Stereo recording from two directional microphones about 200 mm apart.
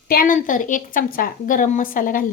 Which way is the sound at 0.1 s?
45° left (ahead or behind).